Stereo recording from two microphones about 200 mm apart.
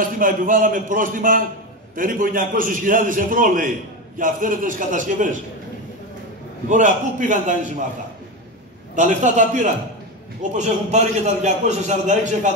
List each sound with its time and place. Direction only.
0.0 s a man's voice: 45° right (ahead or behind)
6.7 s a man's voice: 40° right (ahead or behind)
8.9 s a man's voice: 40° right (ahead or behind)